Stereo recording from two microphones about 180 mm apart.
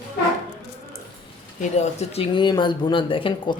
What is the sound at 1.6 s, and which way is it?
Speech, 40° left (ahead or behind).